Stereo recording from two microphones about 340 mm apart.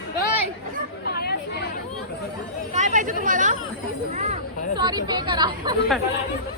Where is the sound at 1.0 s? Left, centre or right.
Left.